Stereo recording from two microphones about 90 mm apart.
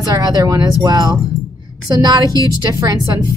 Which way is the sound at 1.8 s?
50° right (ahead or behind).